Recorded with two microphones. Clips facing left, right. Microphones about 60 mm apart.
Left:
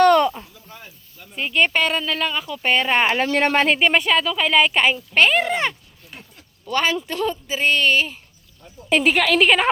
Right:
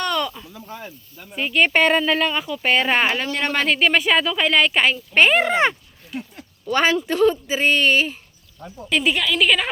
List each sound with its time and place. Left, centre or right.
0.0 s a sound: left
0.5 s snake: right
1.4 s a woman's voice: centre
1.7 s speech: centre
2.5 s a woman's voice: centre
3.2 s a woman's voice: left
3.5 s speech: centre
3.8 s a woman's voice: centre
5.3 s speech: centre
9.3 s a woman's voice: left